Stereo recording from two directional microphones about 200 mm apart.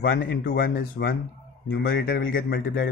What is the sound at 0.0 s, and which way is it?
Speech, 50° left (ahead or behind).